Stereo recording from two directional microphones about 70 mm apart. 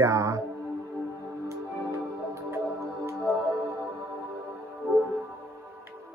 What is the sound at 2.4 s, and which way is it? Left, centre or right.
Music, right.